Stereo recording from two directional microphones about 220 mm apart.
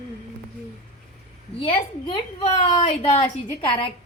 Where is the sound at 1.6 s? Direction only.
25° left (ahead or behind).